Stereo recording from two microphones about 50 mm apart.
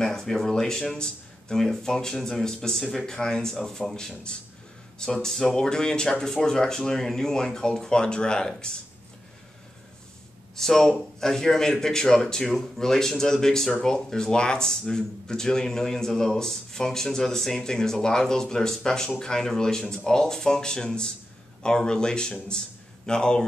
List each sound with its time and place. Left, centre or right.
0.0 s speech: centre
10.5 s speech: centre